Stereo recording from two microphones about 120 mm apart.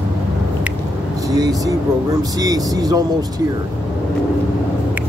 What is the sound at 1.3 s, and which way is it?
Speech, 30° right (ahead or behind).